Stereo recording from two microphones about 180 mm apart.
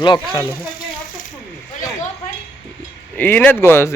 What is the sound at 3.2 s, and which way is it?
Speech, 10° left (ahead or behind).